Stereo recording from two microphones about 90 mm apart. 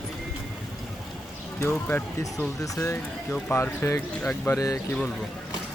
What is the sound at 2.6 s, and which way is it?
Speech, 40° left (ahead or behind).